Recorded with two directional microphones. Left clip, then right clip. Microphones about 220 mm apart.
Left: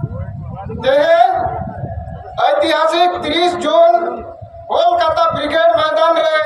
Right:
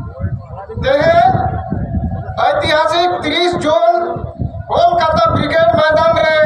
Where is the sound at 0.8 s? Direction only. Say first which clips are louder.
Even; 20° right (ahead or behind).